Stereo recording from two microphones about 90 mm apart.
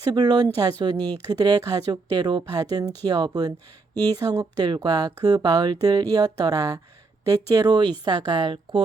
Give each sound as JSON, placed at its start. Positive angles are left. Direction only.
{"t": 0.1, "sound": "speech", "side_deg": -50}